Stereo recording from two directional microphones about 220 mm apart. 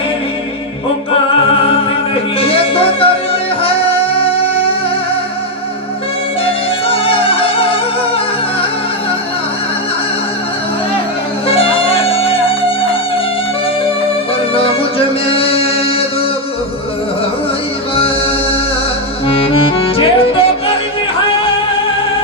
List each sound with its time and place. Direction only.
2.4 s music: 25° left (ahead or behind)
6.4 s music: 25° left (ahead or behind)
11.4 s music: 25° left (ahead or behind)
14.5 s music: 25° left (ahead or behind)
17.9 s music: 25° left (ahead or behind)